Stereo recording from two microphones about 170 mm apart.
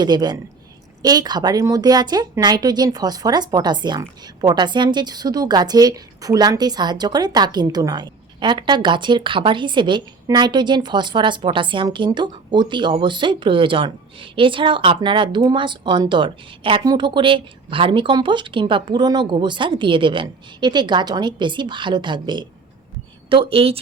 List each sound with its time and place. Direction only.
0.0 s a woman's voice: 25° right (ahead or behind)